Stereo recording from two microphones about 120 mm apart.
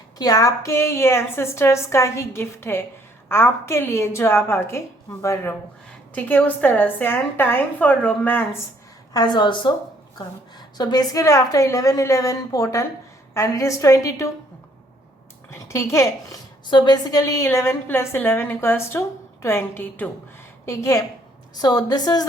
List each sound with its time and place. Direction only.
0.2 s a woman's voice: 30° left (ahead or behind); by 8.4 s 15° left (ahead or behind)
9.1 s a woman's voice: 40° left (ahead or behind)
10.8 s a woman's voice: 35° left (ahead or behind)
15.4 s a woman's voice: 25° left (ahead or behind)
16.6 s a woman's voice: 40° left (ahead or behind); by 20.1 s 15° left (ahead or behind)
20.7 s a woman's voice: 25° left (ahead or behind)